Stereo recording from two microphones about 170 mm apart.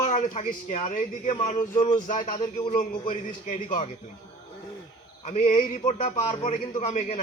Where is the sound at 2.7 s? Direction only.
50° left (ahead or behind).